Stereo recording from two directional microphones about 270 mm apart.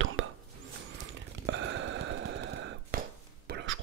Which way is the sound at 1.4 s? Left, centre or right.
Right.